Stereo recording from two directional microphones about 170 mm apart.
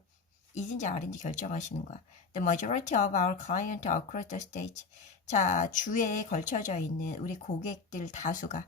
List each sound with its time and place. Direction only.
0.5 s speech: 45° left (ahead or behind)